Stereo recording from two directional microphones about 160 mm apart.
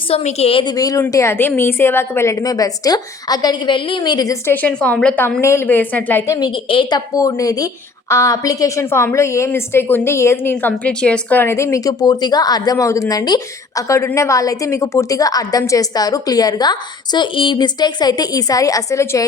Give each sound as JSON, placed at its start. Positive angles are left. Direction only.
{"t": 0.1, "sound": "a woman's voice", "side_deg": 40}
{"t": 4.5, "sound": "a woman's voice", "side_deg": 5}
{"t": 6.5, "sound": "a woman's voice", "side_deg": 30}